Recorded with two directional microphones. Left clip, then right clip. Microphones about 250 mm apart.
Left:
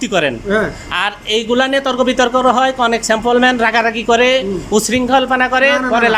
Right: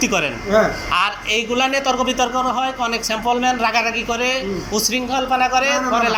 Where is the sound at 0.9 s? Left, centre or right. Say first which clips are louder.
Left 3 dB; left.